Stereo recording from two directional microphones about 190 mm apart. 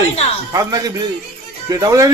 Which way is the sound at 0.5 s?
20° right (ahead or behind).